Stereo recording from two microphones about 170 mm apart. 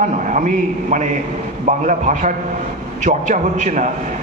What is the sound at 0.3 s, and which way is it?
A man's voice, 45° right (ahead or behind).